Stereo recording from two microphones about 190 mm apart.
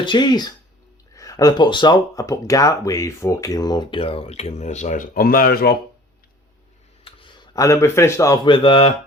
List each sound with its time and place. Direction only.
0.0 s speech: 25° left (ahead or behind); by 5.7 s 55° left (ahead or behind)
7.0 s speech: 25° left (ahead or behind)